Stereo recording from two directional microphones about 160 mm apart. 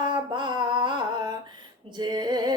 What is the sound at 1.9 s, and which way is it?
Female singing, 30° right (ahead or behind).